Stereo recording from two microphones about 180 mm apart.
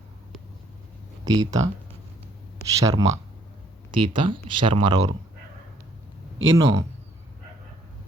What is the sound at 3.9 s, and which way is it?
Speech, 30° right (ahead or behind).